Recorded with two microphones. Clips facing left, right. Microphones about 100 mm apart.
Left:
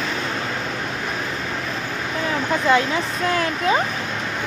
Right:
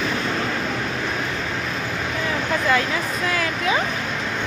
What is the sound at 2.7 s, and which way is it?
Speech, 25° left (ahead or behind).